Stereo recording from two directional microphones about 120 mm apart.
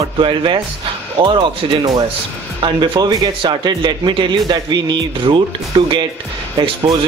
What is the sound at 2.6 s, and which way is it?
Speech, 40° right (ahead or behind).